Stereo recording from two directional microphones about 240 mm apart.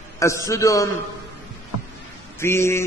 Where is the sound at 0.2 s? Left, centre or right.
Centre.